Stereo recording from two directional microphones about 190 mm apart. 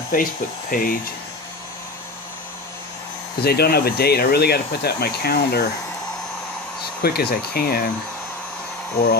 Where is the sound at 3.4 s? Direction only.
55° left (ahead or behind).